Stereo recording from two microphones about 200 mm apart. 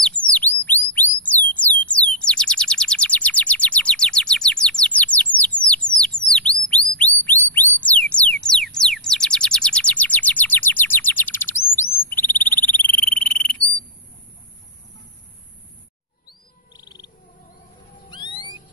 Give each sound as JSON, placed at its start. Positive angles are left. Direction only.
{"t": 0.0, "sound": "bird", "side_deg": 5}
{"t": 7.0, "sound": "music", "side_deg": 10}
{"t": 8.7, "sound": "a sound", "side_deg": 5}
{"t": 13.0, "sound": "frog", "side_deg": 5}
{"t": 16.3, "sound": "music", "side_deg": 20}
{"t": 18.1, "sound": "owl", "side_deg": 25}